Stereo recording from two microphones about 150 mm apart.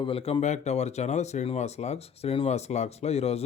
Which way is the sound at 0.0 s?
40° left (ahead or behind).